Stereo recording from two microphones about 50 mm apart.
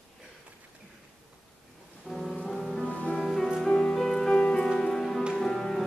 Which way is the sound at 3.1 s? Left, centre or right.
Centre.